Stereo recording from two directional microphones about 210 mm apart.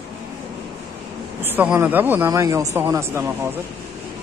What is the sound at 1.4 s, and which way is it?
Speech, 10° right (ahead or behind).